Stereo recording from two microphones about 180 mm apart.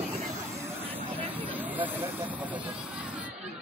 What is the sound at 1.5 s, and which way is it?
Vehicle, 10° right (ahead or behind).